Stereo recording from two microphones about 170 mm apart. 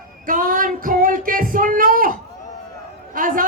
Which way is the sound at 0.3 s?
55° right (ahead or behind).